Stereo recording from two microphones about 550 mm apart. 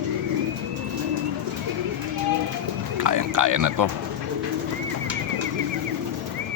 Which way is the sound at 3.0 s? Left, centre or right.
Right.